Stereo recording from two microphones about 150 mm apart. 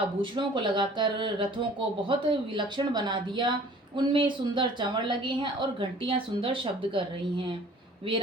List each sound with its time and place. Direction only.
0.2 s a woman's voice: 30° right (ahead or behind)